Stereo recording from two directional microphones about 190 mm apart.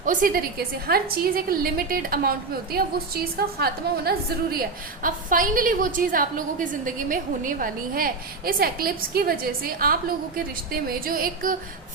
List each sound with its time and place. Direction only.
0.0 s a woman's voice: 45° right (ahead or behind)